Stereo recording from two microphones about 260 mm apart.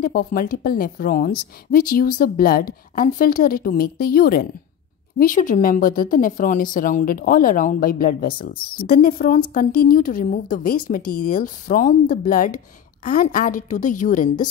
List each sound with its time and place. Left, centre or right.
0.0 s a woman's voice: left